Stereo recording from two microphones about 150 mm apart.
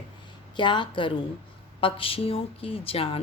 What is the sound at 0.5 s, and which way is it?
Speech, 30° left (ahead or behind).